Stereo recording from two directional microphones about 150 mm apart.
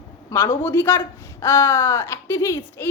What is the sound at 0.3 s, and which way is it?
Speech, 20° left (ahead or behind).